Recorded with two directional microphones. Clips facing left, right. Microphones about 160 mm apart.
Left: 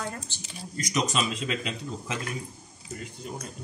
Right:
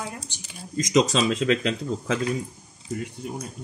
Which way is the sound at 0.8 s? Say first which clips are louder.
Right 7 dB; 90° right.